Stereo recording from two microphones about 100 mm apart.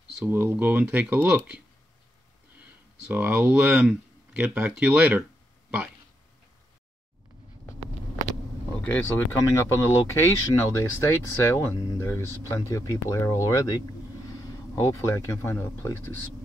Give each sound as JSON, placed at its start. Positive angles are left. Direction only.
{"t": 0.2, "sound": "speech", "side_deg": -20}
{"t": 2.6, "sound": "a sound", "side_deg": -15}
{"t": 3.3, "sound": "speech", "side_deg": -15}
{"t": 8.8, "sound": "speech", "side_deg": 20}